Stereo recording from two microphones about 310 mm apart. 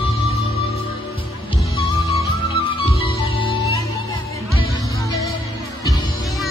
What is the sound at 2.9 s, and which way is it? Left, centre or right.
Music, centre.